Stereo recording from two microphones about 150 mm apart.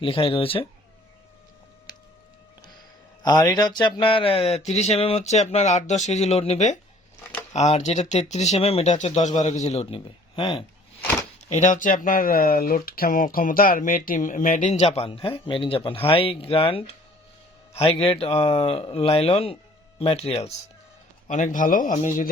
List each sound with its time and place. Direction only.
0.0 s speech: 35° left (ahead or behind)
3.2 s speech: 25° left (ahead or behind)
11.3 s speech: 50° left (ahead or behind)
21.2 s speech: 55° left (ahead or behind)